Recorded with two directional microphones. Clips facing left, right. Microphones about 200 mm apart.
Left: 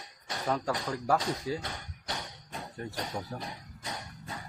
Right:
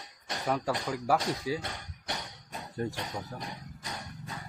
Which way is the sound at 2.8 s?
35° right (ahead or behind).